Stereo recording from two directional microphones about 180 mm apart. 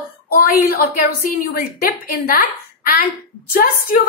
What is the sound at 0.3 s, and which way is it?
A woman's voice, 55° left (ahead or behind).